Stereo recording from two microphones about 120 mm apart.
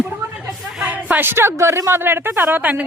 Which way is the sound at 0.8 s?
10° right (ahead or behind).